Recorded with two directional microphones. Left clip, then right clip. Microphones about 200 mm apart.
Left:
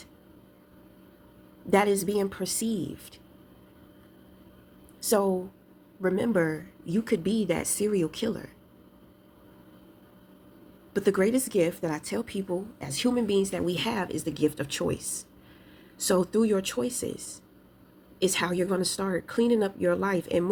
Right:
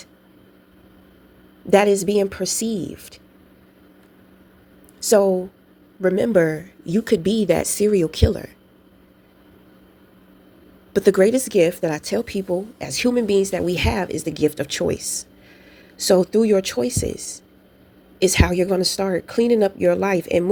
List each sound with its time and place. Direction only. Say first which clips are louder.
1.7 s speech: right 8 dB; 35° right (ahead or behind)
5.0 s a woman's voice: right 9 dB; 30° right (ahead or behind)
10.9 s speech: right 9 dB; 35° right (ahead or behind)